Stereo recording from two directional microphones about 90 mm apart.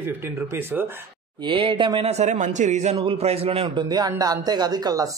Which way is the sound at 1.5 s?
70° right (ahead or behind).